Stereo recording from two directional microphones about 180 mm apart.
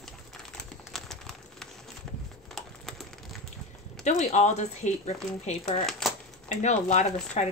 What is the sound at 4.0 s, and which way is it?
Speech, 40° left (ahead or behind).